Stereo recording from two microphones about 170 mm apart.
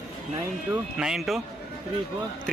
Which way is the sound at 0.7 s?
5° right (ahead or behind).